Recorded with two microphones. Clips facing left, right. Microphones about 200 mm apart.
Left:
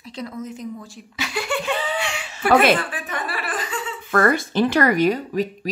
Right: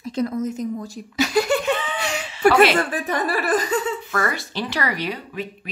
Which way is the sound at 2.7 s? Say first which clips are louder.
Right 6 dB; 40° right (ahead or behind).